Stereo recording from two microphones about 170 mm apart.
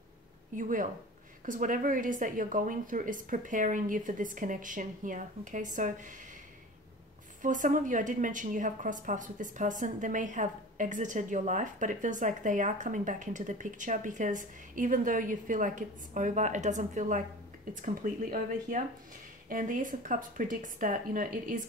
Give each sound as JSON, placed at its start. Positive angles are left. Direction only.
{"t": 0.6, "sound": "a woman's voice", "side_deg": -50}
{"t": 7.4, "sound": "a woman's voice", "side_deg": -50}